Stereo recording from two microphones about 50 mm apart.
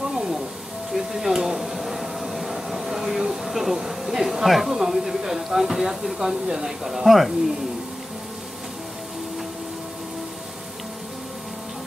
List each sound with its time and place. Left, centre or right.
0.1 s music: centre
0.9 s hair dryer: centre
3.4 s a sound: centre